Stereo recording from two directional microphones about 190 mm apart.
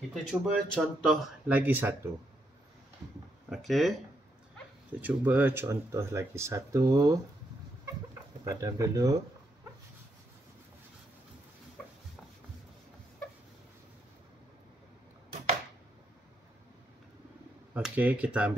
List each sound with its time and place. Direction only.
0.1 s speech: centre (ahead or behind)
3.4 s a sound: centre (ahead or behind)
5.0 s speech: 10° right (ahead or behind)
8.5 s speech: 15° right (ahead or behind)
17.7 s speech: 10° right (ahead or behind)